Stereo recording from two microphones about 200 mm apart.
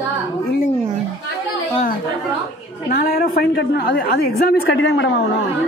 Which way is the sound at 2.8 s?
50° left (ahead or behind).